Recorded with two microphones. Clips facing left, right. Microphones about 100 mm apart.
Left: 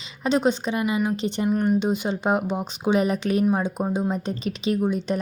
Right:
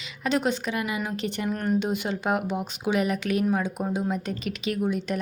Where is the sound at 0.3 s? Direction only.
25° left (ahead or behind).